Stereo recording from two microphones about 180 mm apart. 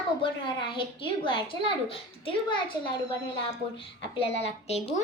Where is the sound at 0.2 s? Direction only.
25° left (ahead or behind).